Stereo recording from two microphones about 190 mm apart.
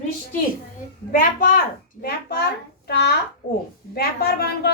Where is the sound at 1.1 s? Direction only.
45° left (ahead or behind).